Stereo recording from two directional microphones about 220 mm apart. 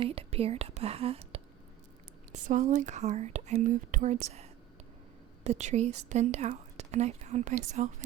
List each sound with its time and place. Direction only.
0.0 s a woman's voice: 25° right (ahead or behind)
5.4 s a woman's voice: 30° right (ahead or behind)